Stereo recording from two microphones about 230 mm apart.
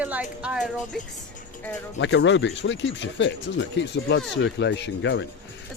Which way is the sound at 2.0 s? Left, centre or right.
Left.